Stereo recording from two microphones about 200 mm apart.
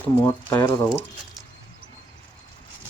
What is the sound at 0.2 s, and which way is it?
Speech, 15° left (ahead or behind).